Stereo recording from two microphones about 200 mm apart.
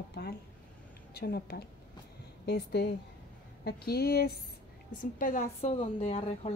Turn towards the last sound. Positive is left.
turn(degrees=30)  # may be behind; listen again after turning